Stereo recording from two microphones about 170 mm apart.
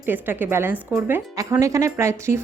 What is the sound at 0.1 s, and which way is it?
A woman's voice, 10° right (ahead or behind).